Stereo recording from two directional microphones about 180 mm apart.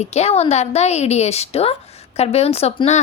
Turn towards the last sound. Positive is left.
turn(degrees=35)  # may be behind; listen again after turning